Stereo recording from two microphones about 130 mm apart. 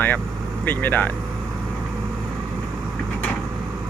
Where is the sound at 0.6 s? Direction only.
15° left (ahead or behind).